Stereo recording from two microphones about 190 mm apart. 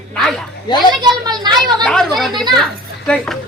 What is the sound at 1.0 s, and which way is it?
Speech, 20° right (ahead or behind).